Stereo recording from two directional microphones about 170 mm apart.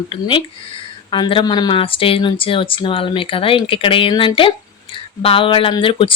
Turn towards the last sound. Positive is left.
turn(degrees=30)  # may be behind; listen again after turning